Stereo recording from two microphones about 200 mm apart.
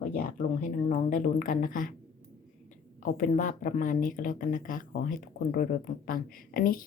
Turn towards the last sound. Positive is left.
turn(degrees=45)  # may be behind; listen again after turning